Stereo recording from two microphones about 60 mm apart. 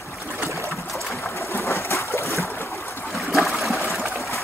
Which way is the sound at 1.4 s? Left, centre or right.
Left.